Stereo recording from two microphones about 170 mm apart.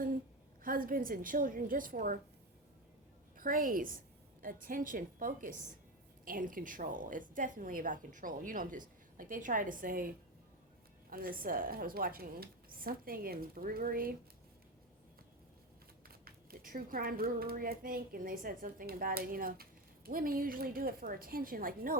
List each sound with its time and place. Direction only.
0.6 s speech: 55° right (ahead or behind)
3.3 s a woman's voice: 55° right (ahead or behind)
11.1 s speech: 60° right (ahead or behind)
16.0 s speech: 60° right (ahead or behind)